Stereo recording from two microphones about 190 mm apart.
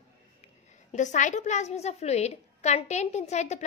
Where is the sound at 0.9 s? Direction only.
40° left (ahead or behind).